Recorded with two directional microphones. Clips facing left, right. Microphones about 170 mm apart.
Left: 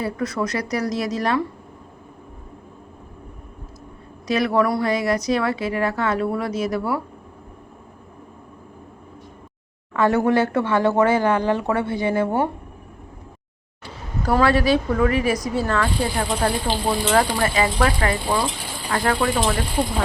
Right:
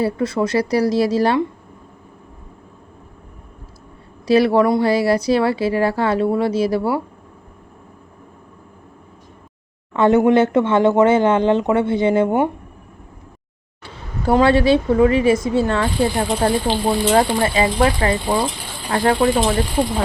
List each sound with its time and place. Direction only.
0.0 s speech: 30° right (ahead or behind)
4.3 s speech: 30° right (ahead or behind)
9.9 s speech: 25° right (ahead or behind)
14.3 s speech: 25° right (ahead or behind)